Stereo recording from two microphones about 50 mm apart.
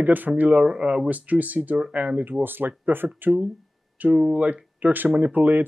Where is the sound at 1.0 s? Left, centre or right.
Right.